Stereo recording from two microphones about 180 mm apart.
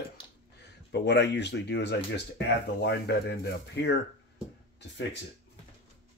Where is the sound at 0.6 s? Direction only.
70° left (ahead or behind).